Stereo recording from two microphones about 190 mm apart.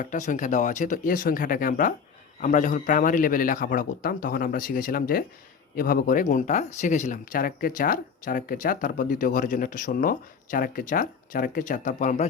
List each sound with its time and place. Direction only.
0.0 s speech: 40° left (ahead or behind)